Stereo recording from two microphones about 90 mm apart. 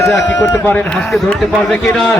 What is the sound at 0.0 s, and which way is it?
Speech, 30° left (ahead or behind).